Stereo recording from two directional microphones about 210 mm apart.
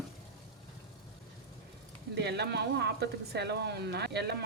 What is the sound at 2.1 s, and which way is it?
Speech, 50° right (ahead or behind).